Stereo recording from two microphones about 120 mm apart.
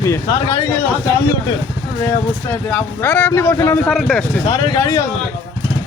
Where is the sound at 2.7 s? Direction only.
15° left (ahead or behind).